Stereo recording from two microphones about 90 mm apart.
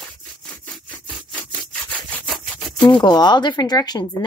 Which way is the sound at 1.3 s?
15° left (ahead or behind).